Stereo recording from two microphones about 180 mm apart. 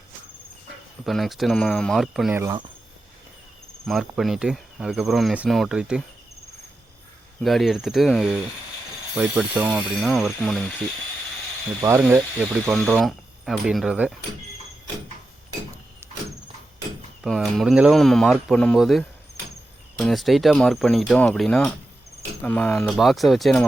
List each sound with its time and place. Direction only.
1.0 s speech: centre (ahead or behind)
2.3 s speech: 15° right (ahead or behind)
3.8 s speech: centre (ahead or behind)
7.4 s speech: centre (ahead or behind)
11.8 s speech: 10° right (ahead or behind)
17.2 s speech: centre (ahead or behind)